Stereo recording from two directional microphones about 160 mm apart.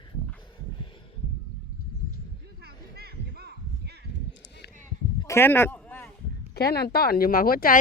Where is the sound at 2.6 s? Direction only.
75° right (ahead or behind).